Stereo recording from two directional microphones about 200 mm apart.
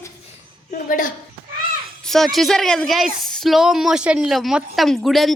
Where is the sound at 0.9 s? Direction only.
40° left (ahead or behind).